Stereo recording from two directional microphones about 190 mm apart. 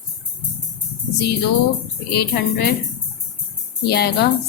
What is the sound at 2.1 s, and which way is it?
Speech, 55° left (ahead or behind).